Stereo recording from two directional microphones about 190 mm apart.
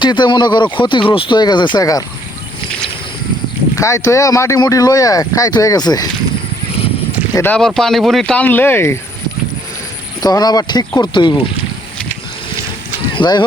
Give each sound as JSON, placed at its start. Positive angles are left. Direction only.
{"t": 0.0, "sound": "speech", "side_deg": 25}
{"t": 3.8, "sound": "speech", "side_deg": 15}
{"t": 7.3, "sound": "speech", "side_deg": 10}
{"t": 10.2, "sound": "speech", "side_deg": 20}
{"t": 13.1, "sound": "speech", "side_deg": 25}